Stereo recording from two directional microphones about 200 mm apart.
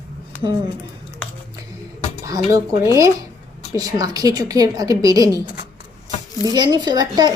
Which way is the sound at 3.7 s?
20° right (ahead or behind).